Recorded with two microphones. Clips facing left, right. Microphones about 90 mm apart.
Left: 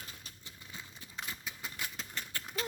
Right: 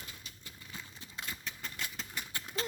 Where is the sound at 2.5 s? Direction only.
30° right (ahead or behind).